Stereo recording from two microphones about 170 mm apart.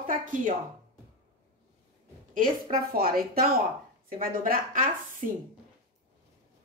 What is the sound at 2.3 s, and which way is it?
A woman's voice, 50° right (ahead or behind).